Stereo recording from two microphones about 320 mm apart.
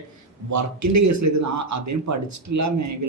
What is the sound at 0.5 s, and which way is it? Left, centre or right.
A man's voice, right.